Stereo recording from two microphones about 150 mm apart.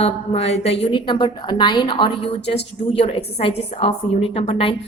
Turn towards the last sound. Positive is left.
turn(degrees=40)  # may be behind; listen again after turning